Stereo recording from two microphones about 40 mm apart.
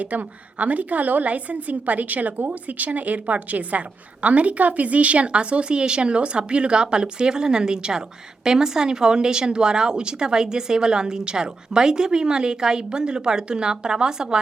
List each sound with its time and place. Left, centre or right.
0.0 s a woman's voice: right; by 14.3 s centre